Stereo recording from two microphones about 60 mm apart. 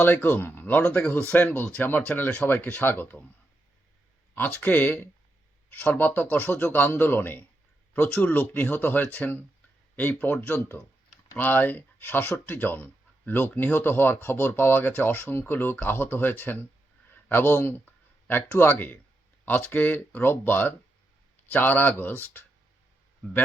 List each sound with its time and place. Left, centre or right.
0.0 s speech: left
4.4 s speech: left